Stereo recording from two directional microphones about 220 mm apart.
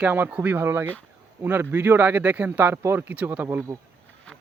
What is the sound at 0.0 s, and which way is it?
Speech, 10° right (ahead or behind).